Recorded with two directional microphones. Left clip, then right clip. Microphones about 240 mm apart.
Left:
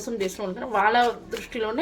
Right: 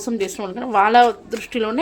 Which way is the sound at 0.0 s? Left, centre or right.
Right.